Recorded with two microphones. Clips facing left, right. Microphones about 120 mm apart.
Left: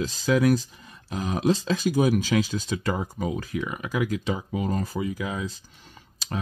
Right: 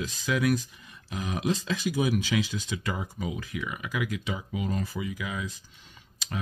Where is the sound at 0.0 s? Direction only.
35° left (ahead or behind).